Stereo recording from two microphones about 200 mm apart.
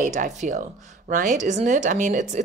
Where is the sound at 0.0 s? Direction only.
40° right (ahead or behind).